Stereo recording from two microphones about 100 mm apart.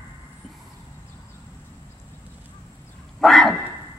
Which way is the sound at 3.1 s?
Centre (ahead or behind).